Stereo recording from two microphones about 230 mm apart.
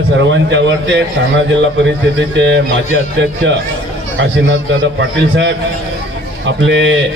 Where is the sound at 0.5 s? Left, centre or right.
Right.